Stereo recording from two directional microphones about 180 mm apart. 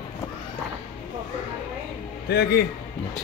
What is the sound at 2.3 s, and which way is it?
Speech, 65° left (ahead or behind).